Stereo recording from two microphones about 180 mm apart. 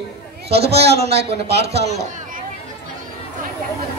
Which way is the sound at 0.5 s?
65° right (ahead or behind).